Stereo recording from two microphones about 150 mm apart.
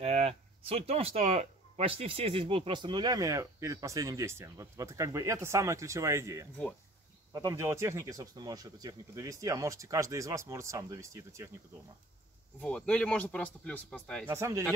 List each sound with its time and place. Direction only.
0.0 s speech: 45° right (ahead or behind); by 11.5 s 20° right (ahead or behind)
12.5 s speech: 10° left (ahead or behind)
14.2 s speech: 20° right (ahead or behind)